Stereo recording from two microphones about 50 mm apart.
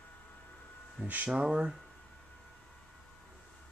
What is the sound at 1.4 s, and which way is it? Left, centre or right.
Speech, centre.